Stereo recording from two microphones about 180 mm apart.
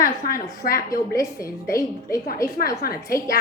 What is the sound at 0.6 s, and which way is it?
Speech, 55° left (ahead or behind).